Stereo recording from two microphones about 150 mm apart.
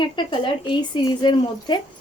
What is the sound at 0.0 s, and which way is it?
A woman's voice, 30° left (ahead or behind).